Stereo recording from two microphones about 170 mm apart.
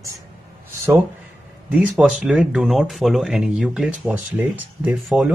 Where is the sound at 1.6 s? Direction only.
5° right (ahead or behind).